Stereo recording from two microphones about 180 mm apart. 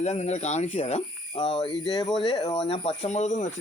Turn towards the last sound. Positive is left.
turn(degrees=40)  # may be behind; listen again after turning